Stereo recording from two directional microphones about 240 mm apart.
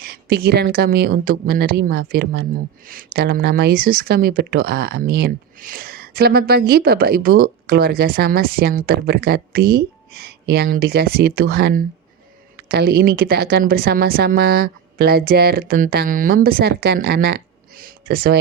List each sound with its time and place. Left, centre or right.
0.0 s speech: right